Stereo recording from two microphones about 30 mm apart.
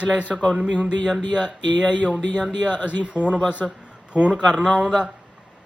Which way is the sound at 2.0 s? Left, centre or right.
Right.